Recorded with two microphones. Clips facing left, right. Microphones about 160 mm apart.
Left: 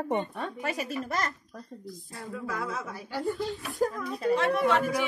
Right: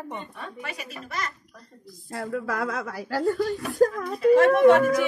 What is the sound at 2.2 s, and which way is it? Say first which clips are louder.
Speech: right 7 dB; 80° right.